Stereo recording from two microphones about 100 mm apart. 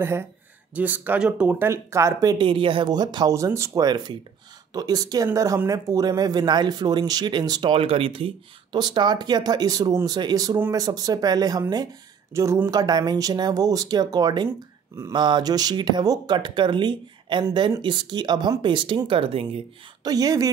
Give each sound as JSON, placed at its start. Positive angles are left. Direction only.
{"t": 0.0, "sound": "speech", "side_deg": -25}
{"t": 1.6, "sound": "speech", "side_deg": -30}
{"t": 2.3, "sound": "speech", "side_deg": -60}
{"t": 2.9, "sound": "speech", "side_deg": -45}
{"t": 3.3, "sound": "speech", "side_deg": -30}
{"t": 3.8, "sound": "speech", "side_deg": -45}
{"t": 7.7, "sound": "speech", "side_deg": -65}
{"t": 8.7, "sound": "speech", "side_deg": -45}
{"t": 12.7, "sound": "speech", "side_deg": -45}
{"t": 20.0, "sound": "speech", "side_deg": -40}